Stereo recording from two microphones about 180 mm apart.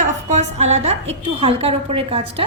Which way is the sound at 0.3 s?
40° right (ahead or behind).